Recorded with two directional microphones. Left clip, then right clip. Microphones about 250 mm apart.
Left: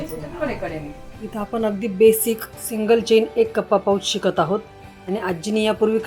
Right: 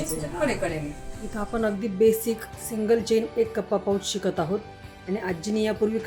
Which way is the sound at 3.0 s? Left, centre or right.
Right.